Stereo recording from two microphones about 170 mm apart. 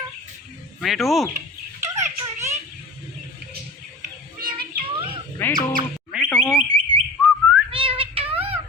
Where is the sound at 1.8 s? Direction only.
15° right (ahead or behind).